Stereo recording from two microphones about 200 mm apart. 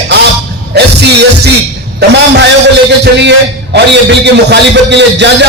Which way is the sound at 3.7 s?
60° right (ahead or behind).